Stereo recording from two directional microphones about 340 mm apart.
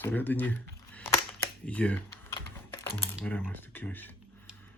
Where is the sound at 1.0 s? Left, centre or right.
Centre.